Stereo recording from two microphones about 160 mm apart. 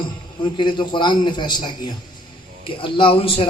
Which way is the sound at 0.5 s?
30° left (ahead or behind).